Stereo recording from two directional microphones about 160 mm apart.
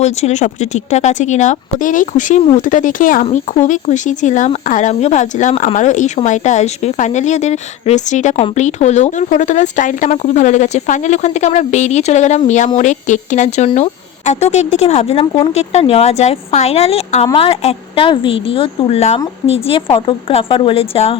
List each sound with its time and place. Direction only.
0.0 s speech: 45° left (ahead or behind)